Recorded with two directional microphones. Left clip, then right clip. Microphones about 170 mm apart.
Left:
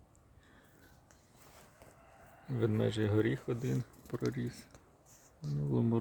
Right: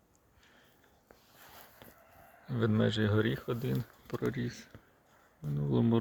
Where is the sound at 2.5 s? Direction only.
5° left (ahead or behind).